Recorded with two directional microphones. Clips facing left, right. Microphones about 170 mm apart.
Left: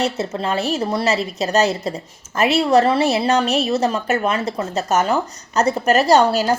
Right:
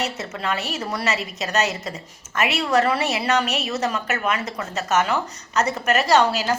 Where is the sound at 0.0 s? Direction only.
30° left (ahead or behind).